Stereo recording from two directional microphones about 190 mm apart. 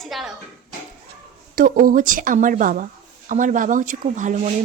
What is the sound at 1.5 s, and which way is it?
Speech, 45° right (ahead or behind).